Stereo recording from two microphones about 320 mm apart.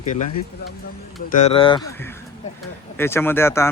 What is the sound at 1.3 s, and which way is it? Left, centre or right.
Speech, centre.